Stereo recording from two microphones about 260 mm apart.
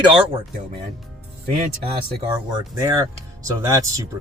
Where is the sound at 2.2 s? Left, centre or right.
Centre.